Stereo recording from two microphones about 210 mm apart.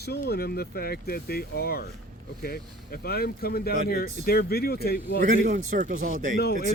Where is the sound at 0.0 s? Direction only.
50° left (ahead or behind).